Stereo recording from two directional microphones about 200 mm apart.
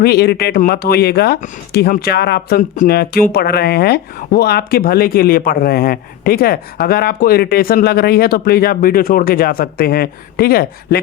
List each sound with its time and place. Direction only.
0.0 s speech: 50° left (ahead or behind)